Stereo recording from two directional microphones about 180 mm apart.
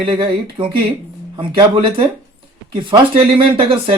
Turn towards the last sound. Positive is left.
turn(degrees=-30)  # may be behind; listen again after turning